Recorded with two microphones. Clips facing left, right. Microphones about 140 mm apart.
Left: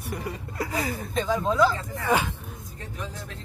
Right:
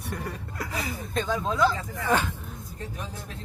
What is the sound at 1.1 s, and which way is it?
Speech, centre (ahead or behind).